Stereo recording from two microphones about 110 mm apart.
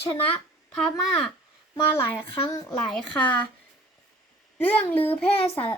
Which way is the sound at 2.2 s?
55° left (ahead or behind).